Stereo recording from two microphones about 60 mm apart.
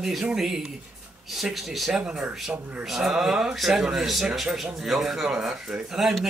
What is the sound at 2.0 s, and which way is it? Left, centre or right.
Speech, centre.